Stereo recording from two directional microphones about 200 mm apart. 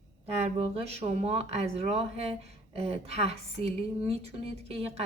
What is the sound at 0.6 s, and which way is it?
Speech, 30° right (ahead or behind).